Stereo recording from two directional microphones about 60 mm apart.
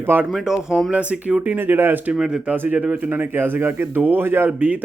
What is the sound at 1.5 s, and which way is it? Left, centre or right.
Speech, right.